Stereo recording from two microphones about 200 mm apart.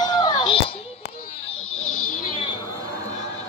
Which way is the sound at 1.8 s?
90° left.